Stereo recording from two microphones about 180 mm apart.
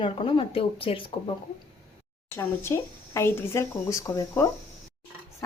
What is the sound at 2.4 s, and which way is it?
Speech, 15° left (ahead or behind).